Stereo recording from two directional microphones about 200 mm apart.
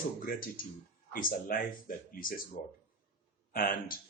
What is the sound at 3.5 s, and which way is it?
Speech, 45° left (ahead or behind).